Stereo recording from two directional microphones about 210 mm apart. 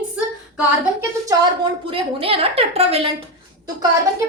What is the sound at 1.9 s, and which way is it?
A woman's voice, 25° right (ahead or behind).